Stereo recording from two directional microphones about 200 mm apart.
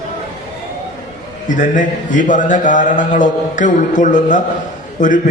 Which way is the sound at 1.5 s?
40° left (ahead or behind).